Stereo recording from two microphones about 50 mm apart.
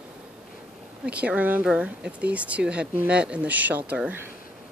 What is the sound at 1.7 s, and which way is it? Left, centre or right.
Speech, right.